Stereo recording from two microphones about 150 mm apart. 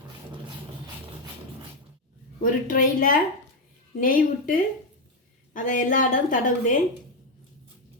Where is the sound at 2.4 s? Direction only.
65° left (ahead or behind).